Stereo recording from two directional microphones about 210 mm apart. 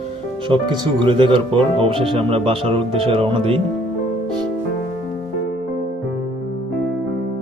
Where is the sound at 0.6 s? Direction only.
20° right (ahead or behind).